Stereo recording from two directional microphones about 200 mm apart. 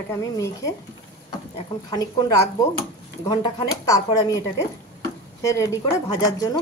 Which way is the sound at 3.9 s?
15° left (ahead or behind).